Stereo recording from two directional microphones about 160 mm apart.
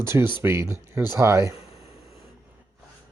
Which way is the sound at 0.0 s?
15° right (ahead or behind).